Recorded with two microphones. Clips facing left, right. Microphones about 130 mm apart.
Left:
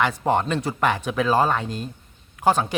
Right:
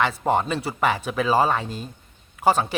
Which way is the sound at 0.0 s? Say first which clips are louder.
Even; centre (ahead or behind).